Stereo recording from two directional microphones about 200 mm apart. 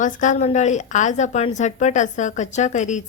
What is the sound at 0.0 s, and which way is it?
A woman's voice, 40° left (ahead or behind).